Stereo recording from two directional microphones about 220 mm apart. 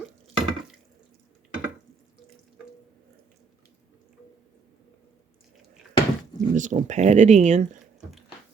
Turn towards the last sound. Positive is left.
turn(degrees=-30)  # may be behind; listen again after turning